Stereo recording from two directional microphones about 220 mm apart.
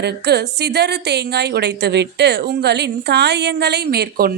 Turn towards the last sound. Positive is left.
turn(degrees=-45)  # may be behind; listen again after turning